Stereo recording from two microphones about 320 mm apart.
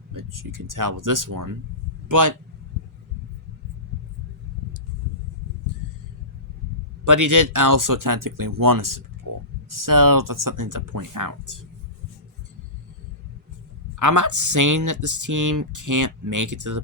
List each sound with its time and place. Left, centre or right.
0.1 s a man's voice: right
7.0 s speech: right
14.0 s speech: right